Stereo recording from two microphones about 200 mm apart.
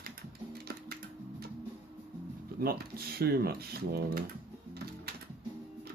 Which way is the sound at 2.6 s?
50° right (ahead or behind).